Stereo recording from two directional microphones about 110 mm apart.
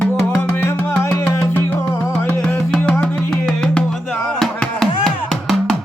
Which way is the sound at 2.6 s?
10° left (ahead or behind).